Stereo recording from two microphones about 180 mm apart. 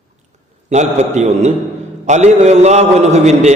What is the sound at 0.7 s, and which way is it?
A man's voice, 40° right (ahead or behind).